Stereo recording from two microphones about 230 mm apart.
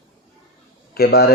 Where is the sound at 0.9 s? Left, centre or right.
Left.